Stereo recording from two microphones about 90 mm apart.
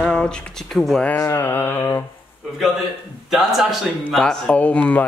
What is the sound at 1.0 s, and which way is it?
Speech, 15° left (ahead or behind).